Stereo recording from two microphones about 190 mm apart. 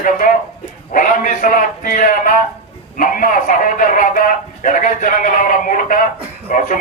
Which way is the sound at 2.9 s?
45° left (ahead or behind).